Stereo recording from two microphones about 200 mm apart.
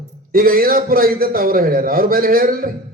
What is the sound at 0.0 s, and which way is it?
A man's voice, 45° right (ahead or behind).